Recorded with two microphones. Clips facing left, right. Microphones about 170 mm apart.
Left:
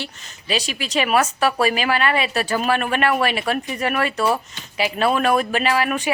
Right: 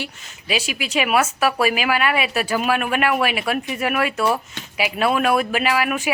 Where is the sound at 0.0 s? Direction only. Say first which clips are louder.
Right 1 dB; 10° right (ahead or behind).